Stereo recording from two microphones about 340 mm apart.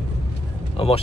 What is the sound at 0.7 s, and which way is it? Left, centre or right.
Speech, centre.